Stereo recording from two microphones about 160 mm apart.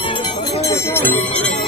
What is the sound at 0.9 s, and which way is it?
Music, 10° left (ahead or behind).